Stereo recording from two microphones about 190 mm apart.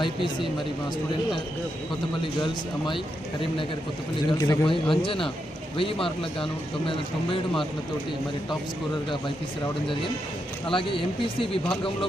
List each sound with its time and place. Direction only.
2.2 s speech: 25° left (ahead or behind)
4.3 s speech: 25° left (ahead or behind)
10.7 s speech: 25° left (ahead or behind)